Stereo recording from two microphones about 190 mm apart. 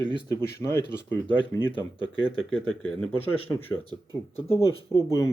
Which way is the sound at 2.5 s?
5° left (ahead or behind).